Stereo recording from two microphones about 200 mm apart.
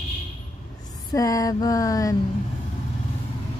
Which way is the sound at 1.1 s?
15° left (ahead or behind).